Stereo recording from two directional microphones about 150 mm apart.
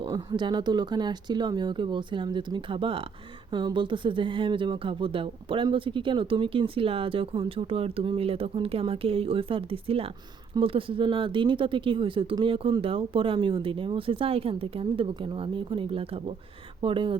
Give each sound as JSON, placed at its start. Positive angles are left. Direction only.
{"t": 0.0, "sound": "speech", "side_deg": -30}